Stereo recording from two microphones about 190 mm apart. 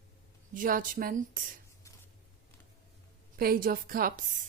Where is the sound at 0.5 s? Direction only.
45° right (ahead or behind).